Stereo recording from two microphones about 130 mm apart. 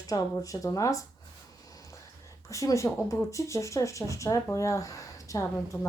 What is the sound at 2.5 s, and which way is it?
Speech, 25° left (ahead or behind).